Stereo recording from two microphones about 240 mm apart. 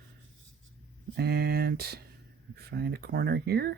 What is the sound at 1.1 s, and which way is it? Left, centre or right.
Speech, right.